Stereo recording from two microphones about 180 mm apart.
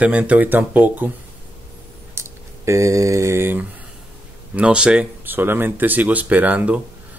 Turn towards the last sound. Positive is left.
turn(degrees=-10)  # may be behind; listen again after turning